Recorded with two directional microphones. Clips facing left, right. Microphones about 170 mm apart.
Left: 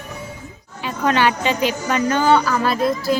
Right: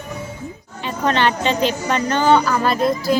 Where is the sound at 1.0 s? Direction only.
10° left (ahead or behind).